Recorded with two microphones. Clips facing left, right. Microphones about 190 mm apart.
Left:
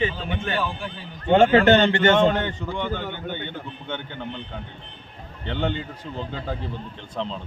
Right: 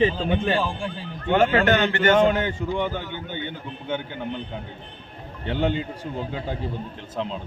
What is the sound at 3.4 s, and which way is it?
Speech, 10° right (ahead or behind).